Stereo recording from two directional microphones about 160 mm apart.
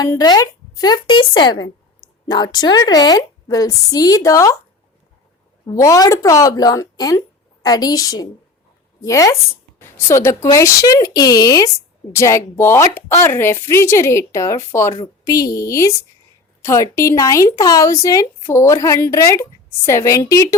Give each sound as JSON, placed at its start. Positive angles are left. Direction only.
{"t": 0.0, "sound": "a woman's voice", "side_deg": 25}
{"t": 5.7, "sound": "a woman's voice", "side_deg": 20}